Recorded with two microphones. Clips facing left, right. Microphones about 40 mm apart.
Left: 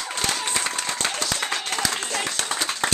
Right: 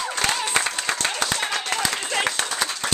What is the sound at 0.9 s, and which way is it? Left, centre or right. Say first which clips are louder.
Clapping: right 4 dB; right.